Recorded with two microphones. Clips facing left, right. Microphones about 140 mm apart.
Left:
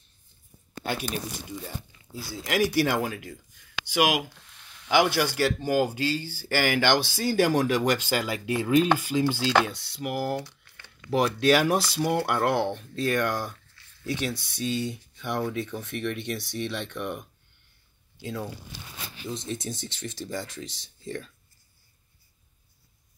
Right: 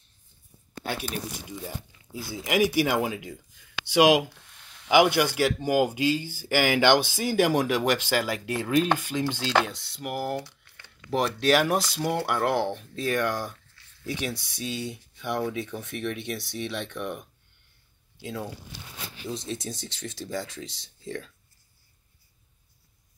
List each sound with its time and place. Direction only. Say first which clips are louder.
2.3 s speech: right 1 dB; 15° right (ahead or behind)
4.8 s speech: right 3 dB; 15° right (ahead or behind)